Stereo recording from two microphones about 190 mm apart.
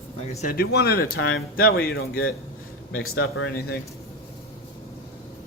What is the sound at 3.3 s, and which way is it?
Speech, 65° left (ahead or behind).